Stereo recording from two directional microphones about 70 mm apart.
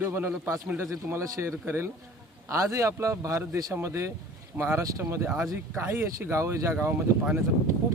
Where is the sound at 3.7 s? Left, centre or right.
Right.